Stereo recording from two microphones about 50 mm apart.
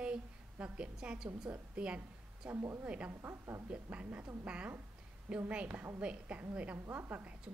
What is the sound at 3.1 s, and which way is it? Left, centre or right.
Speech, right.